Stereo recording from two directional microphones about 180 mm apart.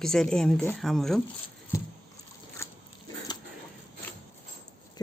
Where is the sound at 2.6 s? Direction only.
15° left (ahead or behind).